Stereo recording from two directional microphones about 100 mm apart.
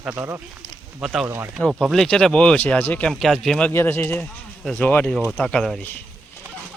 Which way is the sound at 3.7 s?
20° left (ahead or behind).